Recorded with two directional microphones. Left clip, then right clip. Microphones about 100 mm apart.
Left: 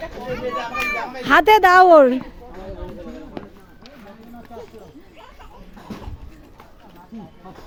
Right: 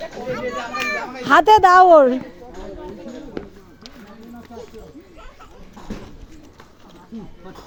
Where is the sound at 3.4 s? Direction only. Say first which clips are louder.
Right 4 dB; 35° left (ahead or behind).